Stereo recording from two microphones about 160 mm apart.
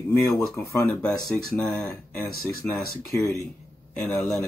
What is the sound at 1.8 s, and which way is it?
Speech, 15° left (ahead or behind).